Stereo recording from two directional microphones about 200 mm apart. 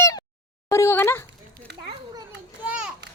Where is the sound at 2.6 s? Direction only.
5° right (ahead or behind).